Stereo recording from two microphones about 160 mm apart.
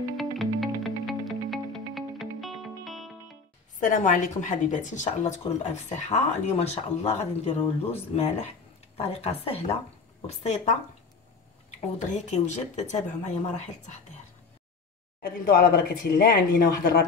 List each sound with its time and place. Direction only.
0.2 s music: centre (ahead or behind)
3.8 s a woman's voice: 55° left (ahead or behind)
12.1 s speech: 45° left (ahead or behind)
15.2 s speech: 75° left (ahead or behind)